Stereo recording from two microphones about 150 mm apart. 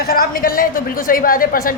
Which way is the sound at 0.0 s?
85° left.